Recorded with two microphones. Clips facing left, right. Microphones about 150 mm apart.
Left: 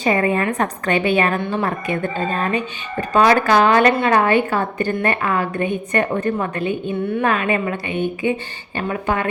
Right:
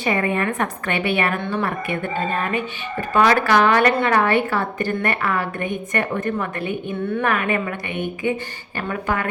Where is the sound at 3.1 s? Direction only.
20° left (ahead or behind).